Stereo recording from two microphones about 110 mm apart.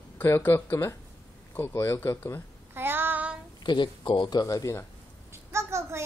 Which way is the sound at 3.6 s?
45° left (ahead or behind).